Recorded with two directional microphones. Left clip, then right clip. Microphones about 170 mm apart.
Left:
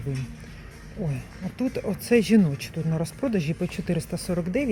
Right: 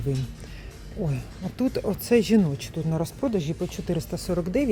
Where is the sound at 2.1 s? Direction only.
5° right (ahead or behind).